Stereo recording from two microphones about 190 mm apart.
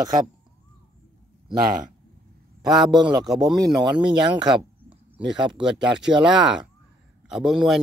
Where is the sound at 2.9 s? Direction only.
25° right (ahead or behind).